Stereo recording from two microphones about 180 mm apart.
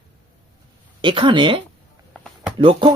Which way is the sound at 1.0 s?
30° right (ahead or behind).